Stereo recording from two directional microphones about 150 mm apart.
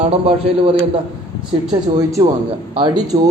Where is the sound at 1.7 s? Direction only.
25° right (ahead or behind).